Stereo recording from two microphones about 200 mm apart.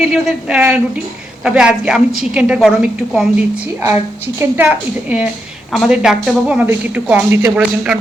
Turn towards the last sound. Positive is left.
turn(degrees=-5)  # may be behind; listen again after turning